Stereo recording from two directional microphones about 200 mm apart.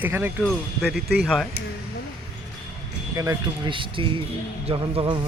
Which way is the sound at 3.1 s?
15° right (ahead or behind).